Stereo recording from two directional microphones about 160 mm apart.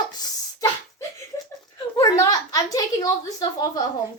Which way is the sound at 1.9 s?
20° left (ahead or behind).